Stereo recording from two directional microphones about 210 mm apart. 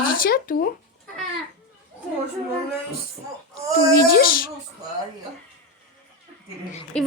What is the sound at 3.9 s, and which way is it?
Speech, 45° left (ahead or behind).